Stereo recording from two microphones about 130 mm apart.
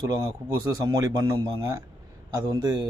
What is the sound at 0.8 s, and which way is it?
A man's voice, 30° right (ahead or behind).